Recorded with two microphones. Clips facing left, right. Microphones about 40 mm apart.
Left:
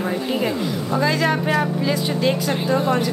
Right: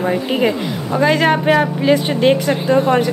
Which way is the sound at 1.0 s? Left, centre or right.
Right.